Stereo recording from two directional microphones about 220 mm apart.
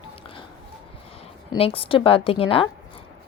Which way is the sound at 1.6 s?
25° left (ahead or behind).